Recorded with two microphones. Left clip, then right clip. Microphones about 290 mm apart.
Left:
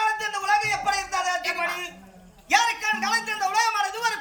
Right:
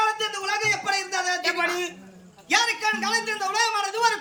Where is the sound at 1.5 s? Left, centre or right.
Centre.